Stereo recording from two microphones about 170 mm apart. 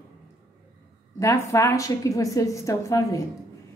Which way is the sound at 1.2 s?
15° left (ahead or behind).